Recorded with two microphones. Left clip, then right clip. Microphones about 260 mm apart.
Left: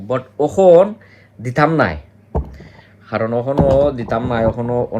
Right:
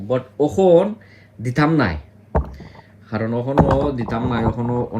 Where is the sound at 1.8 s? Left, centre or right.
Centre.